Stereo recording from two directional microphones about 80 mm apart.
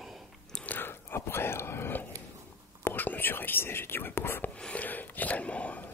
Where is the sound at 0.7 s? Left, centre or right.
Left.